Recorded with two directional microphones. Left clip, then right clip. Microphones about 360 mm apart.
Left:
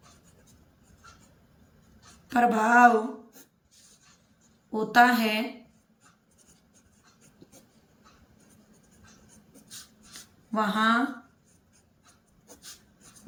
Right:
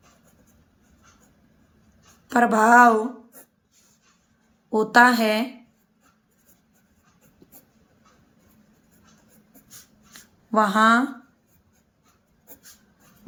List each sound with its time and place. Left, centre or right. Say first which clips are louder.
2.3 s a woman's voice: right 6 dB; centre
4.7 s a woman's voice: right 5 dB; centre
10.5 s a woman's voice: right 7 dB; centre